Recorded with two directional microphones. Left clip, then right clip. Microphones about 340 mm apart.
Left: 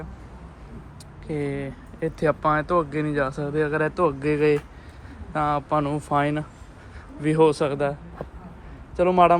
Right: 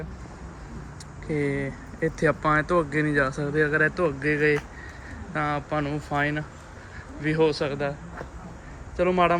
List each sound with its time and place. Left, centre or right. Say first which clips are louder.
1.3 s speech: right 1 dB; centre
9.0 s speech: left 4 dB; centre